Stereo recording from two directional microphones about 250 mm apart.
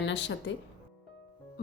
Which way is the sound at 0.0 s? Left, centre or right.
Left.